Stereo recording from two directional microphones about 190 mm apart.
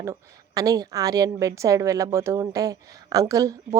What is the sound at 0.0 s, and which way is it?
A woman's voice, 15° right (ahead or behind).